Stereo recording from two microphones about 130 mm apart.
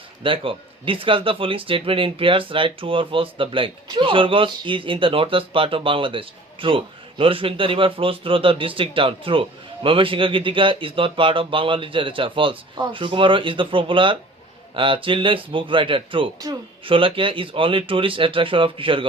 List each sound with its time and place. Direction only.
0.2 s a man's voice: 40° right (ahead or behind)